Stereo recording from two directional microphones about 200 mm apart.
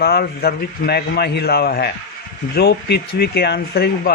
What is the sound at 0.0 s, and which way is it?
Speech, 50° left (ahead or behind).